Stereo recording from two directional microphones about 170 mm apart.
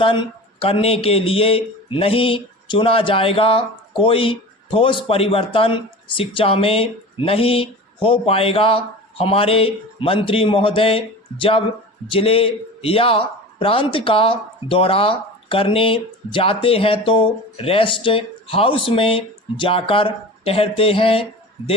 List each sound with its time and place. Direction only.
0.0 s a man's voice: 30° left (ahead or behind)